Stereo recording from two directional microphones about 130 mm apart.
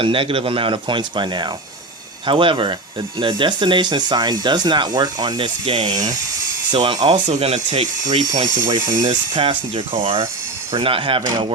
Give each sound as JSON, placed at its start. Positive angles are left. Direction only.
{"t": 0.0, "sound": "speech", "side_deg": -45}
{"t": 7.1, "sound": "speech", "side_deg": -55}
{"t": 8.1, "sound": "speech", "side_deg": -35}